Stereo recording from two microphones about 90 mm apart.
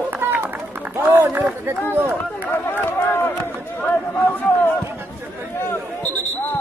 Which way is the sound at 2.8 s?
25° left (ahead or behind).